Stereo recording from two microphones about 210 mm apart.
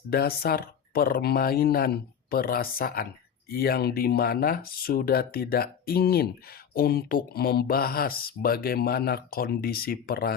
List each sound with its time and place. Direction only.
0.1 s speech: 45° left (ahead or behind)